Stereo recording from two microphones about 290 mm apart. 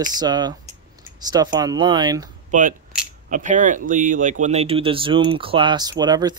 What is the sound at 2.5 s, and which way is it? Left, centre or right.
Speech, right.